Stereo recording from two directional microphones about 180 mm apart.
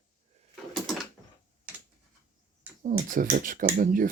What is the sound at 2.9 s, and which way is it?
Speech, 50° right (ahead or behind).